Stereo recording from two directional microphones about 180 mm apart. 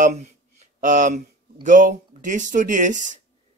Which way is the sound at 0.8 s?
45° right (ahead or behind).